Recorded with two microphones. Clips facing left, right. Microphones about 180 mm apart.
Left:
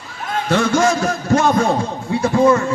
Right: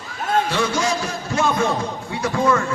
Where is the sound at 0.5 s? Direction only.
50° left (ahead or behind).